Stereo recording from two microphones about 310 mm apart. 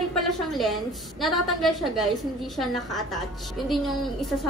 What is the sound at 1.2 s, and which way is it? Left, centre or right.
Speech, centre.